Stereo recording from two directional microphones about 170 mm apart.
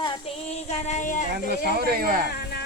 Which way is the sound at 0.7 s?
40° left (ahead or behind).